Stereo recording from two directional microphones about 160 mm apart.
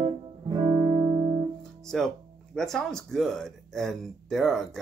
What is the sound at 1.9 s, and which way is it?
Speech, centre (ahead or behind).